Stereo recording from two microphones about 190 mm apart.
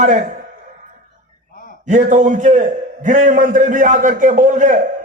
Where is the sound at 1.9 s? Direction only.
40° right (ahead or behind).